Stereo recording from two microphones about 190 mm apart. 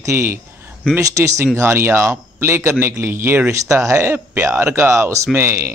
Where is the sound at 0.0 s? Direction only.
15° right (ahead or behind).